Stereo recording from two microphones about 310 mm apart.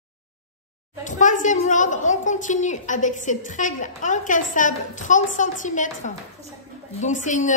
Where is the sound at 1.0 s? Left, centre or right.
Left.